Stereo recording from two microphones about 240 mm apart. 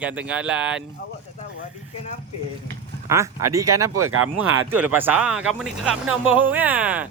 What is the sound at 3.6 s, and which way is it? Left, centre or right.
Speech, right.